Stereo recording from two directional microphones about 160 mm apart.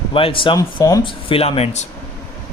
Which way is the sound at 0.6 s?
20° left (ahead or behind).